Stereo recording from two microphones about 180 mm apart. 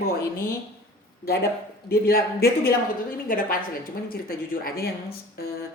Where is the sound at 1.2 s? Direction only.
60° left (ahead or behind).